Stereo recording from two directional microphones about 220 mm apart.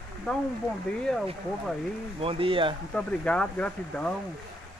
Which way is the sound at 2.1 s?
25° right (ahead or behind).